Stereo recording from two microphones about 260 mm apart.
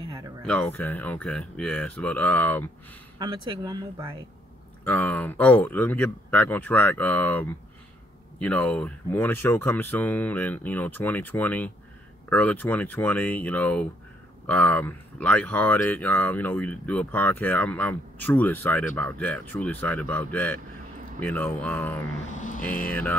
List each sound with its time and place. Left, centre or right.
0.5 s speech: centre
3.4 s speech: centre
4.8 s speech: centre
22.4 s speech: left
22.8 s speech: centre